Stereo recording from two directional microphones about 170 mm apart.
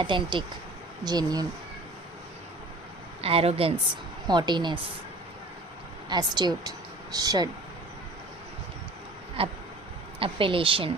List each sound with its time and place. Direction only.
0.0 s speech: 30° right (ahead or behind)
3.2 s speech: 35° right (ahead or behind)
6.1 s speech: 25° right (ahead or behind)
9.4 s speech: 35° right (ahead or behind)